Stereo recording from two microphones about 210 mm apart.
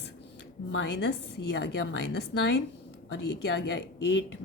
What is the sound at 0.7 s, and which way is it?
A woman's voice, 60° left (ahead or behind).